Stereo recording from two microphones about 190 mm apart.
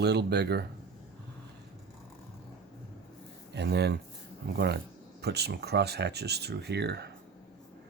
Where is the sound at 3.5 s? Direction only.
60° right (ahead or behind).